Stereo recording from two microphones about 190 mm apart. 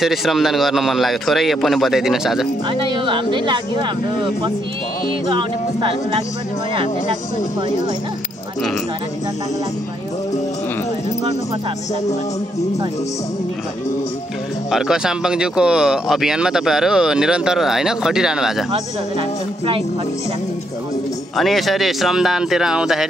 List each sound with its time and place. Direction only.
0.0 s speech: centre (ahead or behind)
2.7 s speech: 25° right (ahead or behind)
5.3 s speech: 25° right (ahead or behind)
14.7 s speech: 5° right (ahead or behind)
18.7 s speech: 30° right (ahead or behind)
21.4 s speech: centre (ahead or behind)